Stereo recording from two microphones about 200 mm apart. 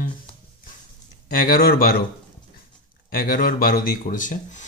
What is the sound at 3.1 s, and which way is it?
Speech, 45° left (ahead or behind).